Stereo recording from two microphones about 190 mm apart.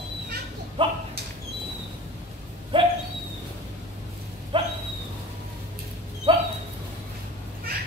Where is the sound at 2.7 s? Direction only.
25° right (ahead or behind).